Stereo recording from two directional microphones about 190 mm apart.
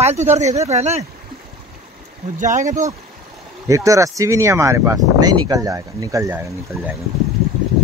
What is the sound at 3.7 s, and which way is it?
Speech, 15° right (ahead or behind).